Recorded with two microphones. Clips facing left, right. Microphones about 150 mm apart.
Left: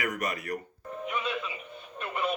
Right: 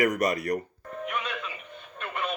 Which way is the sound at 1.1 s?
5° left (ahead or behind).